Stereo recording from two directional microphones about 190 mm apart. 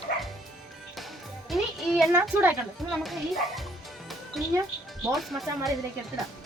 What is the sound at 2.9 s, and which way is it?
Speech, centre (ahead or behind).